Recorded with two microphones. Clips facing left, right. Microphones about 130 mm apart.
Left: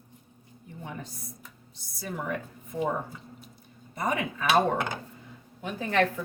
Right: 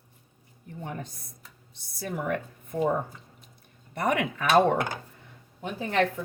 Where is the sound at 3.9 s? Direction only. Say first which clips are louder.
Right 3 dB; 75° right (ahead or behind).